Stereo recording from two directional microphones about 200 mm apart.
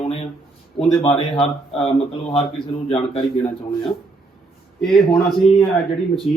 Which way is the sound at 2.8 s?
30° left (ahead or behind).